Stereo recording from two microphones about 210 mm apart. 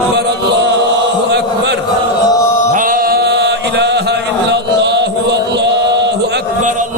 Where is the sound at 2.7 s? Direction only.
40° right (ahead or behind).